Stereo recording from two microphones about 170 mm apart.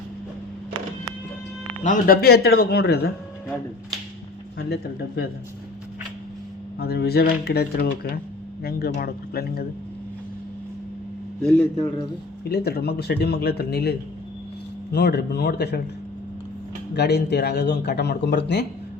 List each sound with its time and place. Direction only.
1.8 s a man's voice: 55° left (ahead or behind)
4.5 s speech: 70° left (ahead or behind)
6.7 s a man's voice: 70° left (ahead or behind)
12.5 s speech: 70° left (ahead or behind)
14.9 s speech: 75° left (ahead or behind)
16.9 s speech: 75° left (ahead or behind)